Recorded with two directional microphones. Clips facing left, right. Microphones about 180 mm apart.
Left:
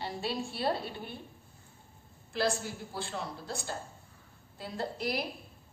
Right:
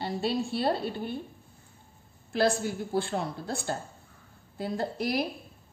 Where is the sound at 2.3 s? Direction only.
55° right (ahead or behind).